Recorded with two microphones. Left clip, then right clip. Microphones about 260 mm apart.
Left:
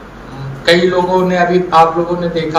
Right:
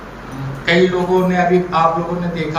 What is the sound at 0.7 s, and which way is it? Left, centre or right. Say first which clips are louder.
A man's voice: left 4 dB; left.